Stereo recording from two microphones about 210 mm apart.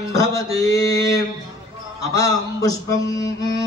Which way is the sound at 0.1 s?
15° left (ahead or behind).